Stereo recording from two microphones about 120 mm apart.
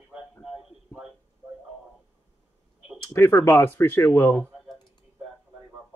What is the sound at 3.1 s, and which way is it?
Speech, 20° left (ahead or behind).